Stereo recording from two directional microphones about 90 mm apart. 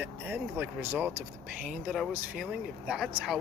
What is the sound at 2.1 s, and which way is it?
Speech, 15° right (ahead or behind).